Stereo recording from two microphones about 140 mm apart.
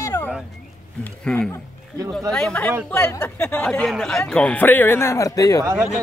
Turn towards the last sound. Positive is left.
turn(degrees=-10)  # may be behind; listen again after turning